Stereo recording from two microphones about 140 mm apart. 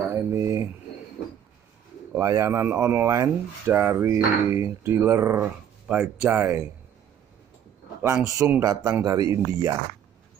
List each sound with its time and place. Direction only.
0.1 s a sound: 20° right (ahead or behind)
2.1 s speech: 20° right (ahead or behind)
8.0 s speech: 20° right (ahead or behind)